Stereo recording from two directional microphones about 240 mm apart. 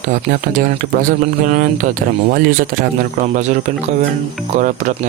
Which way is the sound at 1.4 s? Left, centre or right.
Right.